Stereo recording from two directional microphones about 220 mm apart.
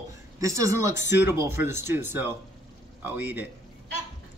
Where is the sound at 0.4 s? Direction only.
15° right (ahead or behind).